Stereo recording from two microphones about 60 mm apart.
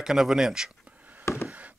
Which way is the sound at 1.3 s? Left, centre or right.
Left.